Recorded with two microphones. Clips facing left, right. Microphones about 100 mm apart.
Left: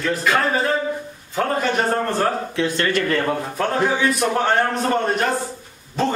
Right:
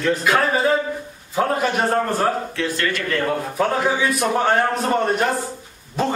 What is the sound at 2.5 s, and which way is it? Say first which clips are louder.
Speech: left 3 dB; 25° left (ahead or behind).